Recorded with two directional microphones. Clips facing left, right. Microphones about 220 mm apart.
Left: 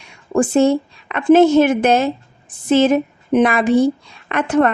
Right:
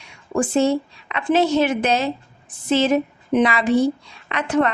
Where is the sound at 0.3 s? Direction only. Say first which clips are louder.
Left 4 dB; 50° left (ahead or behind).